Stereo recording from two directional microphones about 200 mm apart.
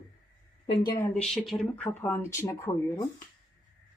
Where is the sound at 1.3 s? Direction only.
Centre (ahead or behind).